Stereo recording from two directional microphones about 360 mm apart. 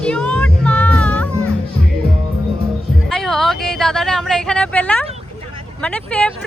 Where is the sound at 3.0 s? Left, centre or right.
Centre.